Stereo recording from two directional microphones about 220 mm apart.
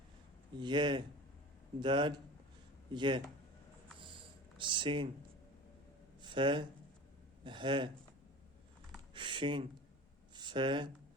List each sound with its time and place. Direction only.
0.5 s speech: 20° right (ahead or behind)
4.5 s speech: 20° right (ahead or behind)
6.2 s speech: 20° right (ahead or behind)
9.1 s speech: 20° right (ahead or behind)